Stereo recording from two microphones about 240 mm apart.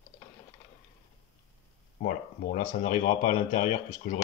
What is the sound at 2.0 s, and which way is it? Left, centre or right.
Speech, left.